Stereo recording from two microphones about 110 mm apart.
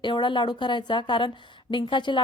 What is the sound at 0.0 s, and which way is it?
A woman's voice, 45° left (ahead or behind).